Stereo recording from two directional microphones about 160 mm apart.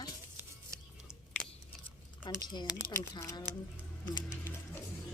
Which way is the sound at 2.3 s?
25° left (ahead or behind).